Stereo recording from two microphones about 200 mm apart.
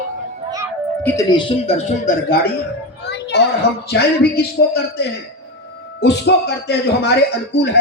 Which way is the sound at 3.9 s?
50° left (ahead or behind).